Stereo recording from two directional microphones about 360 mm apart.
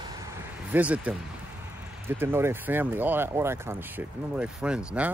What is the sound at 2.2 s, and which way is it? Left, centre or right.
Speech, centre.